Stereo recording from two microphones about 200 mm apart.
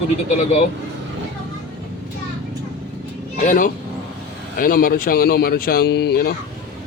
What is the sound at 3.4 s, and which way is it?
Speech, 40° left (ahead or behind).